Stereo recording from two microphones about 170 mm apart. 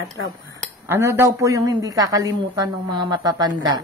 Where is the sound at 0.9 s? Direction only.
15° right (ahead or behind).